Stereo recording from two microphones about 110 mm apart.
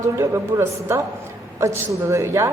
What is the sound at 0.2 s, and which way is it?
A woman's voice, 25° right (ahead or behind).